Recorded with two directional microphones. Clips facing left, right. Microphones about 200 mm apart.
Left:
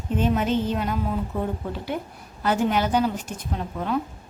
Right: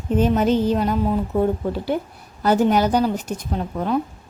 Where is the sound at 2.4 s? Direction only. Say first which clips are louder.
Right 5 dB; 40° right (ahead or behind).